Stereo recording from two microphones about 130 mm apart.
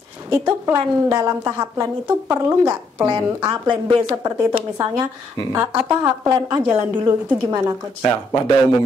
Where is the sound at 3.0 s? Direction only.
35° right (ahead or behind).